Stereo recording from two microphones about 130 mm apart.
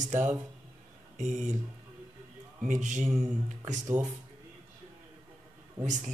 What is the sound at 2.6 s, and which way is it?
Speech, 70° right (ahead or behind).